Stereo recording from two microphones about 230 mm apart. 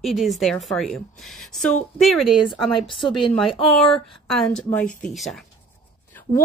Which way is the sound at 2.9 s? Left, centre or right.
Left.